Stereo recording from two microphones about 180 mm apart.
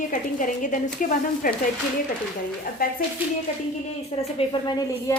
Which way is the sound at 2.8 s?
55° left (ahead or behind).